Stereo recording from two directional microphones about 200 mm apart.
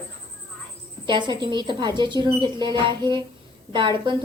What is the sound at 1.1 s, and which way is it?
Speech, 25° right (ahead or behind).